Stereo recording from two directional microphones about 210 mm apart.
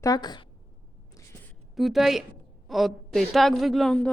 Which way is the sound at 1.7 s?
Centre (ahead or behind).